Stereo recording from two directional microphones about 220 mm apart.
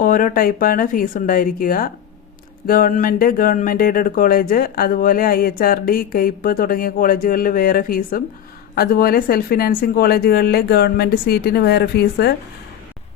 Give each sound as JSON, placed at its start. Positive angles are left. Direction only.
{"t": 0.0, "sound": "speech", "side_deg": 40}